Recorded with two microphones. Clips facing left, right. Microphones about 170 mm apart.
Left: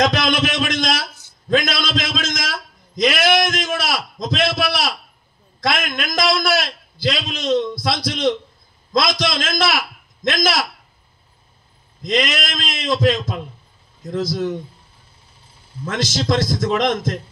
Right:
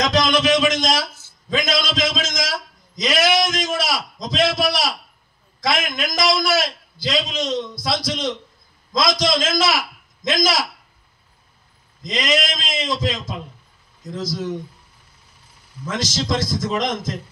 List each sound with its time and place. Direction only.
0.0 s a man's voice: 60° left (ahead or behind)
12.0 s a man's voice: 60° left (ahead or behind)
15.4 s a sound: 30° left (ahead or behind)
15.8 s a man's voice: 60° left (ahead or behind)